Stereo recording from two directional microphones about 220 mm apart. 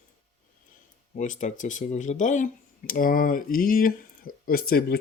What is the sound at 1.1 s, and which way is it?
Speech, 35° left (ahead or behind).